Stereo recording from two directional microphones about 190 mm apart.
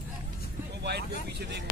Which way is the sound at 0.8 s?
60° right (ahead or behind).